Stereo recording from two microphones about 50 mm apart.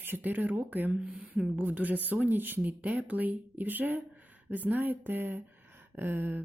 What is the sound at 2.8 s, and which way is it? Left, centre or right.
Speech, right.